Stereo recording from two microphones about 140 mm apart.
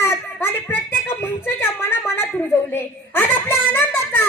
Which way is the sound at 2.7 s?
15° left (ahead or behind).